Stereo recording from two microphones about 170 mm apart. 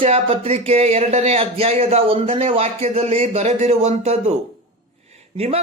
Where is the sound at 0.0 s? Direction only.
35° right (ahead or behind).